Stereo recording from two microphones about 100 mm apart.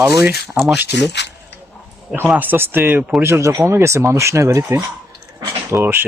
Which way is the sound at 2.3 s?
20° right (ahead or behind).